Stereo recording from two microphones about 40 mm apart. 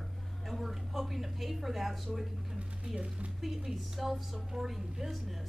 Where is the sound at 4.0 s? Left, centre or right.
Centre.